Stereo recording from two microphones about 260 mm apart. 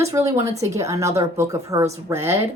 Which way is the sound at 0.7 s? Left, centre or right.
Centre.